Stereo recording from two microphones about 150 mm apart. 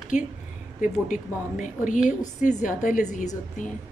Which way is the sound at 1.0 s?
60° left (ahead or behind).